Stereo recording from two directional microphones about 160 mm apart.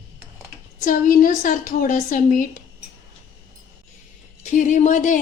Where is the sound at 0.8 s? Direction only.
55° left (ahead or behind).